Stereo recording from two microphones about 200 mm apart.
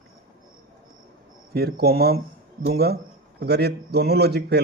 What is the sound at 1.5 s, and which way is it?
A man's voice, 50° right (ahead or behind).